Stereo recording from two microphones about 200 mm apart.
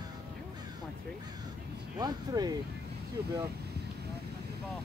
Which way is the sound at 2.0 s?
20° right (ahead or behind).